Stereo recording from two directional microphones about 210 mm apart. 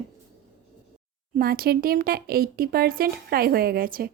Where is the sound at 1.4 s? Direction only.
45° right (ahead or behind).